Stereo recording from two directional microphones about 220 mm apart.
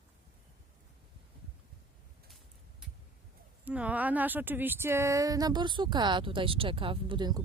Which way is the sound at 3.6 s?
5° right (ahead or behind).